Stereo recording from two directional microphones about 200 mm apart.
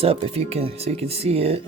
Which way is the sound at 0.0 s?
30° right (ahead or behind).